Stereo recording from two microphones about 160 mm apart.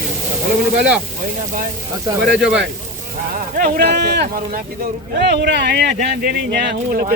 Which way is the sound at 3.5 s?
60° right (ahead or behind).